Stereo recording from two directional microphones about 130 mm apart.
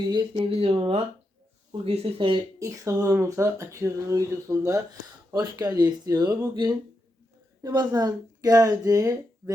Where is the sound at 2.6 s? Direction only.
25° right (ahead or behind).